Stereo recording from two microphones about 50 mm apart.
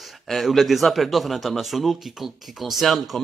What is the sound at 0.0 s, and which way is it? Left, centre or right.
A man's voice, centre.